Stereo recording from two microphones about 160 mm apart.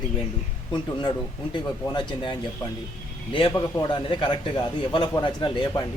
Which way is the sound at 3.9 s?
30° left (ahead or behind).